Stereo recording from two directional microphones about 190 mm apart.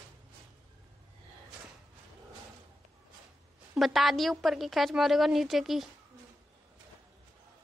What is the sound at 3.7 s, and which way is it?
A woman's voice, centre (ahead or behind).